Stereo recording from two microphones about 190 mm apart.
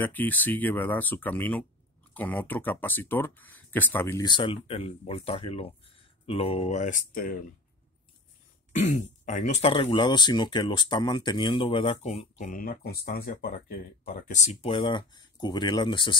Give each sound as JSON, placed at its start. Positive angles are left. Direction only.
{"t": 0.0, "sound": "speech", "side_deg": 10}
{"t": 4.3, "sound": "speech", "side_deg": 25}
{"t": 8.7, "sound": "speech", "side_deg": 40}